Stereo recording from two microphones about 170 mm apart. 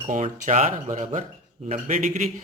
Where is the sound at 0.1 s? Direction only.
50° right (ahead or behind).